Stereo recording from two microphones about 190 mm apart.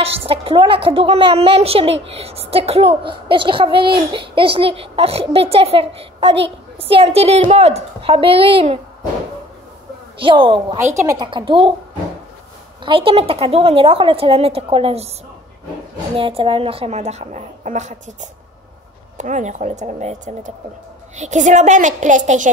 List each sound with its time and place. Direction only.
0.0 s a child's voice: 30° right (ahead or behind)
10.1 s a child's voice: 25° right (ahead or behind)
12.8 s a child's voice: 25° right (ahead or behind)
16.2 s a woman's voice: 25° right (ahead or behind)